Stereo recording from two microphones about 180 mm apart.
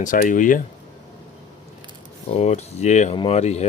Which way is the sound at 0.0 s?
50° left (ahead or behind).